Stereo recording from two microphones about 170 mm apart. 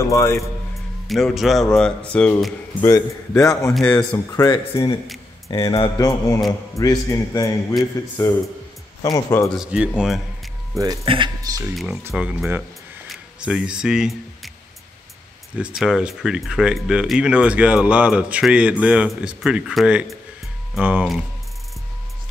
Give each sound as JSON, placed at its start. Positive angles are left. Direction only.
{"t": 0.0, "sound": "speech", "side_deg": 20}
{"t": 1.0, "sound": "speech", "side_deg": 0}
{"t": 2.7, "sound": "a man's voice", "side_deg": 20}
{"t": 3.7, "sound": "speech", "side_deg": 10}
{"t": 4.5, "sound": "a man's voice", "side_deg": 25}
{"t": 9.6, "sound": "speech", "side_deg": -5}
{"t": 10.8, "sound": "speech", "side_deg": -25}
{"t": 11.7, "sound": "speech", "side_deg": 0}
{"t": 15.5, "sound": "speech", "side_deg": -5}